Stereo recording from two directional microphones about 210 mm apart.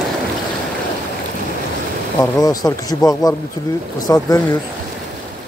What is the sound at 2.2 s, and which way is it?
Speech, 15° left (ahead or behind).